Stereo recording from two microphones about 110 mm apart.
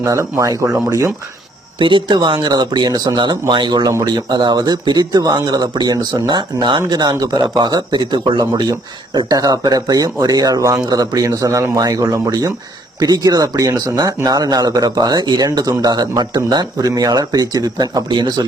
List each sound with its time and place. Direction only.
0.0 s speech: 25° right (ahead or behind)
1.8 s speech: 50° right (ahead or behind)